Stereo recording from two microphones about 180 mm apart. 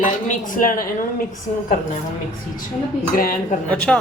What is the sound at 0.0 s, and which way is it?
Speech, 45° left (ahead or behind).